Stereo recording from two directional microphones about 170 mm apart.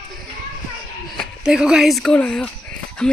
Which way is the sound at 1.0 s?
Centre (ahead or behind).